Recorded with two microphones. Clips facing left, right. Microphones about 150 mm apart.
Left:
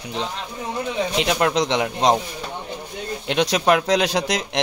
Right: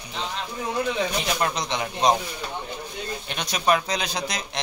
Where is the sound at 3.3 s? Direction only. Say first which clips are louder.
Left 5 dB; 90° left.